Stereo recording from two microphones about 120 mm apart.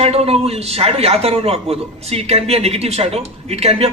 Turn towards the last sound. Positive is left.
turn(degrees=-60)  # may be behind; listen again after turning